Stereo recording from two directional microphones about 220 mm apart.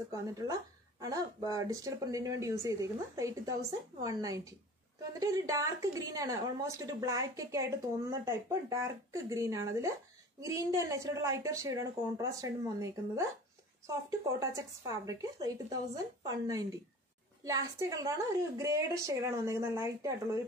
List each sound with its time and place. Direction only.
0.1 s a woman's voice: 15° right (ahead or behind)
14.4 s a woman's voice: 15° right (ahead or behind)